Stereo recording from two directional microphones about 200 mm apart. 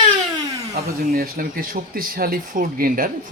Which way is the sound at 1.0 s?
50° right (ahead or behind).